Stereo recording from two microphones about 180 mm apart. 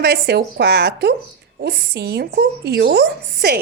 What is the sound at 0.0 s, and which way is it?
A woman's voice, 65° right (ahead or behind).